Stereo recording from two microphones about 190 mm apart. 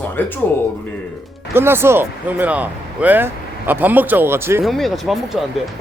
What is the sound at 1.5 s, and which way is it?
Speech, 10° right (ahead or behind).